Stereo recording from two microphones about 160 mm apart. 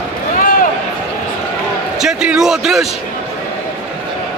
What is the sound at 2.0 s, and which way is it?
Speech, 5° right (ahead or behind).